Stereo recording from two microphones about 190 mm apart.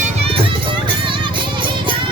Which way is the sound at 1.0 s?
25° right (ahead or behind).